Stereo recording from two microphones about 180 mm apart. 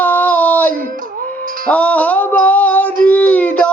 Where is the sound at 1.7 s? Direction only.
10° left (ahead or behind).